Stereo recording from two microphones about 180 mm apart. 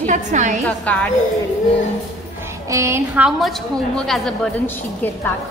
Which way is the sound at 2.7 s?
15° right (ahead or behind).